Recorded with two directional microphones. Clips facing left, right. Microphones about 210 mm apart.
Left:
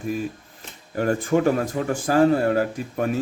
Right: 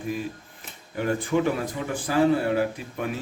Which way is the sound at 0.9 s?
45° left (ahead or behind).